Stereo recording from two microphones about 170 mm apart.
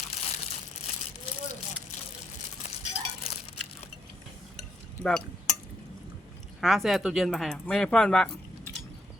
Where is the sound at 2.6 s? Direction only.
40° left (ahead or behind).